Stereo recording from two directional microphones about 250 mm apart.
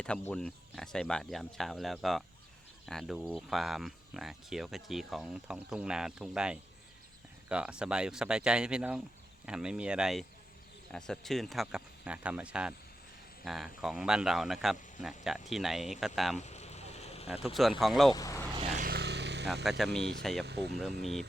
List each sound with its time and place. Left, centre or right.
0.0 s speech: centre
16.4 s vehicle: left
17.2 s speech: centre
18.1 s speech: centre
18.8 s a sound: right
19.6 s speech: centre
20.4 s speech: right
21.0 s speech: centre